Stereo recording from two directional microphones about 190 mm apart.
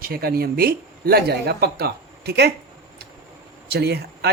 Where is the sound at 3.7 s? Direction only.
60° right (ahead or behind).